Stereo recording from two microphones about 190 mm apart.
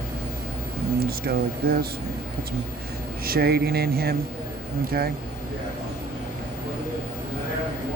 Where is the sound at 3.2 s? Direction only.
55° right (ahead or behind).